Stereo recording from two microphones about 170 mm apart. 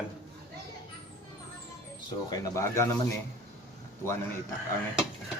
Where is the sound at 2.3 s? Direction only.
20° left (ahead or behind).